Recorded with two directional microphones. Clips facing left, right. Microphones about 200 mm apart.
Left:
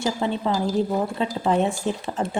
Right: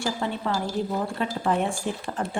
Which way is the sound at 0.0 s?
20° left (ahead or behind).